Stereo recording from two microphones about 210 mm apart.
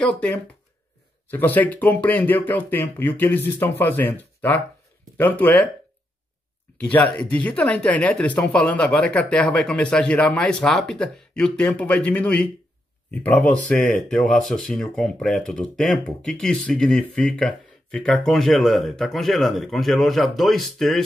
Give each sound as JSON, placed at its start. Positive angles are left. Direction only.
{"t": 0.0, "sound": "speech", "side_deg": 5}
{"t": 6.8, "sound": "speech", "side_deg": 5}